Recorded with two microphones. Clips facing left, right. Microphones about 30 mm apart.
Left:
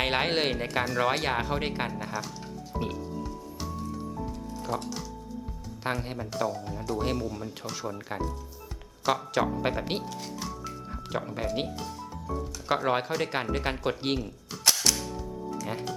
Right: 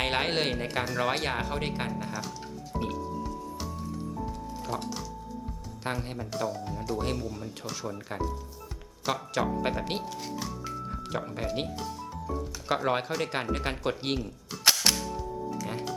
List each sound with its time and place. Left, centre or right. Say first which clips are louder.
0.0 s speech: left 1 dB; centre
2.7 s music: even; centre
4.7 s speech: left 2 dB; centre
10.8 s music: left 3 dB; centre
12.6 s speech: left 1 dB; centre
14.7 s music: right 2 dB; right
15.6 s speech: even; centre